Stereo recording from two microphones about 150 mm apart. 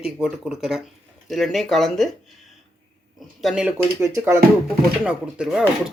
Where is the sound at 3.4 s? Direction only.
5° right (ahead or behind).